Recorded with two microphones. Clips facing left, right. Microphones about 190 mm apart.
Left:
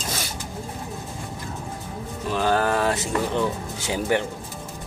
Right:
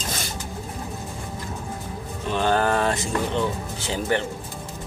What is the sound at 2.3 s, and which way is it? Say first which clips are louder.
Speech: even; 5° left (ahead or behind).